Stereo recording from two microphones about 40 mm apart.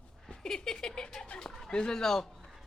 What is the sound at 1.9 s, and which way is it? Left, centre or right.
Speech, centre.